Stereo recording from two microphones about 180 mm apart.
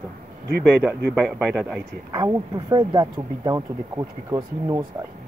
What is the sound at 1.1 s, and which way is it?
Speech, centre (ahead or behind).